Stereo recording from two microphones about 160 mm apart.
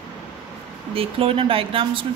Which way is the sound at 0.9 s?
35° right (ahead or behind).